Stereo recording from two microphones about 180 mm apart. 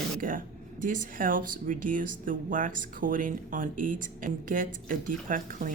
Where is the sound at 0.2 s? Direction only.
50° right (ahead or behind).